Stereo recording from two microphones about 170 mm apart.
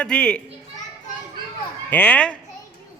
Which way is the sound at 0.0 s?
5° left (ahead or behind).